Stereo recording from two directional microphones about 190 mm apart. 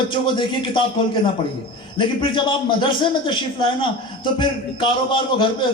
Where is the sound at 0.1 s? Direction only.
25° left (ahead or behind).